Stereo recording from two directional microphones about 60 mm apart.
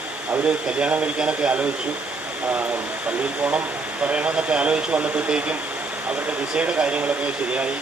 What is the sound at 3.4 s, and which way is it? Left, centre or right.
Speech, right.